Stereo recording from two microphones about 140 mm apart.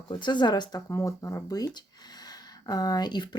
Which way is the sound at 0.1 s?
35° left (ahead or behind).